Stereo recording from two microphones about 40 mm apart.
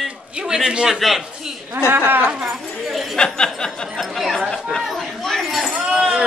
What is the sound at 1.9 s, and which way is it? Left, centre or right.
Speech, right.